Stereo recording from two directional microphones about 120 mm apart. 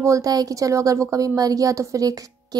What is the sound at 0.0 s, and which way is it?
Speech, 30° right (ahead or behind).